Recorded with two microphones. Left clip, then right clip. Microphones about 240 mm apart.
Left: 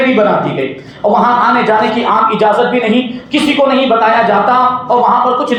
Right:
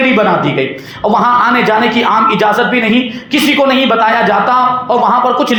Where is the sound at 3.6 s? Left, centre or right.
Right.